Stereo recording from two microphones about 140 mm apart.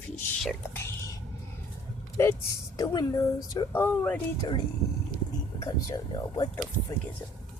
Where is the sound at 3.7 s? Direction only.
15° left (ahead or behind).